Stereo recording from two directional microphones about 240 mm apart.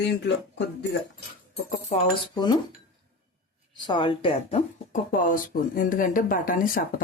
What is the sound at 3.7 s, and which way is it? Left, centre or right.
Speech, centre.